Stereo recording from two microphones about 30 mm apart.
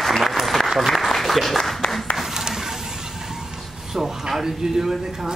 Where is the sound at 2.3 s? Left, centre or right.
Centre.